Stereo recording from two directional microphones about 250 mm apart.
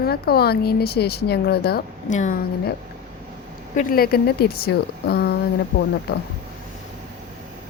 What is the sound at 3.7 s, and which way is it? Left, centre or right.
A woman's voice, left.